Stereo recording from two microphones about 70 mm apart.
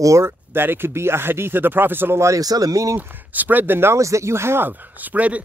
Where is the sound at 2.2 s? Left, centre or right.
Right.